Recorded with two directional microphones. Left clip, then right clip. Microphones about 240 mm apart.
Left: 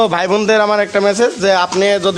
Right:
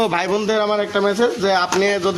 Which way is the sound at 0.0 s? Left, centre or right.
Left.